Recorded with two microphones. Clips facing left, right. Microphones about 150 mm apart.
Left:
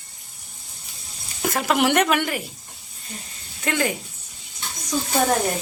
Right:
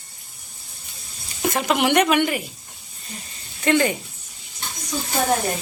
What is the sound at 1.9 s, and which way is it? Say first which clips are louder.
Speech: right 2 dB; 5° right (ahead or behind).